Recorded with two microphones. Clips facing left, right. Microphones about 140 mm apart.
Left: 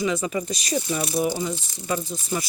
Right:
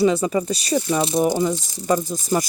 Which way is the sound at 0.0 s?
35° right (ahead or behind).